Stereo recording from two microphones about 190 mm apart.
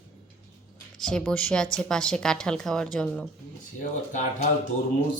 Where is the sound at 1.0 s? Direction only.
5° left (ahead or behind).